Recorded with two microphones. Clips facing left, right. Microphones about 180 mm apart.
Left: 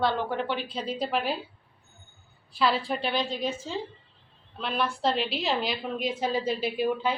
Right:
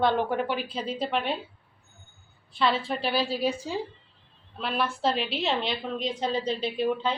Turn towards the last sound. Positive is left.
turn(degrees=5)  # may be behind; listen again after turning